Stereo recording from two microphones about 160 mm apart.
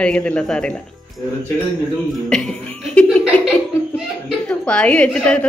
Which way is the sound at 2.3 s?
5° left (ahead or behind).